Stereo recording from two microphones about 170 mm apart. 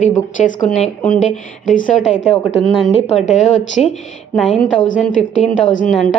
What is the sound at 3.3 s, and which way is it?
Speech, 45° left (ahead or behind).